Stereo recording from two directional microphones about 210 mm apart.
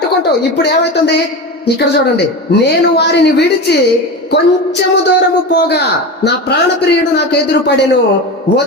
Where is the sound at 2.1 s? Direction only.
50° left (ahead or behind).